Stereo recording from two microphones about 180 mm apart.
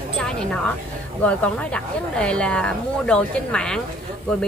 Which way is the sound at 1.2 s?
5° left (ahead or behind).